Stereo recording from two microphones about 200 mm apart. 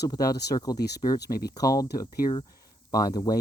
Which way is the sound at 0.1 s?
20° left (ahead or behind).